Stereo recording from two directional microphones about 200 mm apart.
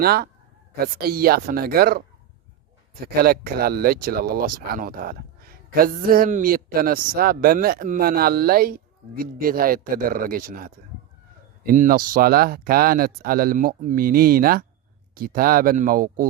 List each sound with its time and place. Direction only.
0.0 s speech: 50° right (ahead or behind)
3.2 s speech: 50° right (ahead or behind)